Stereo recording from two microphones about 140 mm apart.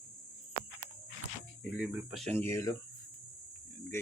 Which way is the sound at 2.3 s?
20° left (ahead or behind).